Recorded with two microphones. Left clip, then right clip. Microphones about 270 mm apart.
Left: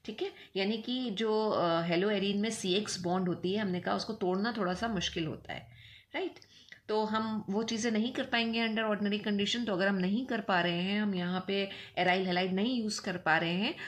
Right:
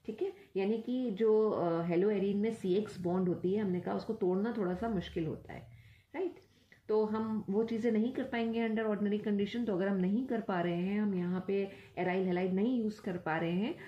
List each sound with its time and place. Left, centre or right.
0.0 s a woman's voice: left
6.9 s a woman's voice: left